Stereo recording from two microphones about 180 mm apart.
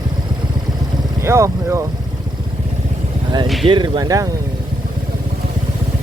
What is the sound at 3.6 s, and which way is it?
Speech, 25° right (ahead or behind).